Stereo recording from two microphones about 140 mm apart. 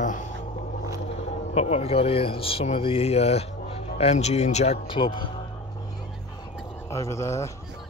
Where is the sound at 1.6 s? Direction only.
45° left (ahead or behind).